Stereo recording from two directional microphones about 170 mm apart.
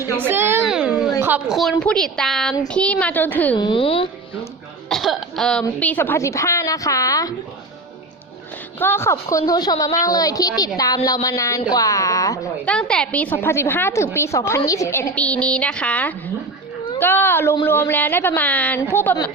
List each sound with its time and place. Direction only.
0.2 s a sound: 15° right (ahead or behind)
1.8 s a woman's voice: 5° left (ahead or behind)
3.5 s a woman's voice: 30° left (ahead or behind)
4.9 s speech: centre (ahead or behind); by 7.3 s 20° left (ahead or behind)
8.8 s a woman's voice: 15° left (ahead or behind)
12.6 s speech: 5° left (ahead or behind)